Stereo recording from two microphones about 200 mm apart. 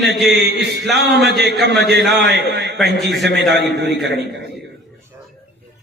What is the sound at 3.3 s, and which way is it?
Speech, centre (ahead or behind).